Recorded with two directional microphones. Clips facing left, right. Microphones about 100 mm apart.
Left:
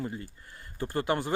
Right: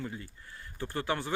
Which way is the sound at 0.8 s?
40° left (ahead or behind).